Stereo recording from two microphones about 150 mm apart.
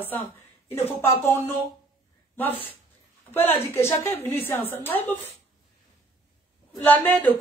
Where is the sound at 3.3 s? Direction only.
15° left (ahead or behind).